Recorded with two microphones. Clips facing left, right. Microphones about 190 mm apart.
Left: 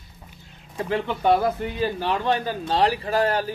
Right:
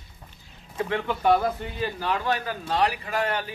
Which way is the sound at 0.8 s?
30° left (ahead or behind).